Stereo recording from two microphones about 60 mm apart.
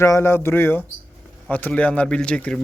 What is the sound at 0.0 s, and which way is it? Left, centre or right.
Speech, left.